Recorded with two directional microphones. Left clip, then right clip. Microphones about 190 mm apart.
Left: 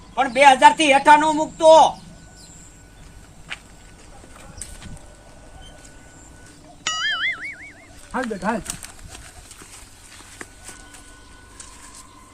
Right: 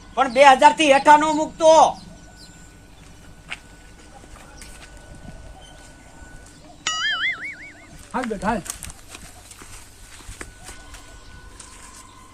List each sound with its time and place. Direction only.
0.3 s speech: 20° right (ahead or behind)
6.8 s music: centre (ahead or behind)
8.1 s speech: centre (ahead or behind)